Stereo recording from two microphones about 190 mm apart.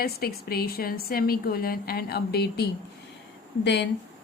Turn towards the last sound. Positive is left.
turn(degrees=65)  # may be behind; listen again after turning